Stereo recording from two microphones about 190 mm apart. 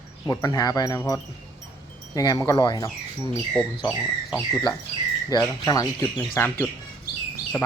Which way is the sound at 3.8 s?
5° right (ahead or behind).